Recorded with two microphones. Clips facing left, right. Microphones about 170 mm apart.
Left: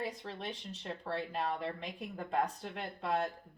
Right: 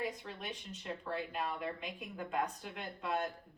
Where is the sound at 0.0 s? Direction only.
30° left (ahead or behind).